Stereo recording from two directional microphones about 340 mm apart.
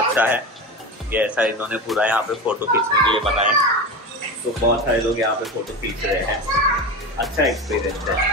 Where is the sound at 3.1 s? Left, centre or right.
Centre.